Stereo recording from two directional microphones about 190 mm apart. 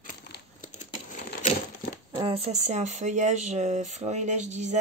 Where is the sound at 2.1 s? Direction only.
20° right (ahead or behind).